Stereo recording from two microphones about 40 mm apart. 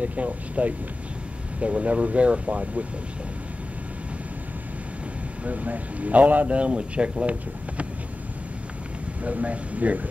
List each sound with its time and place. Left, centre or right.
0.0 s speech: right
5.4 s speech: right
9.2 s speech: right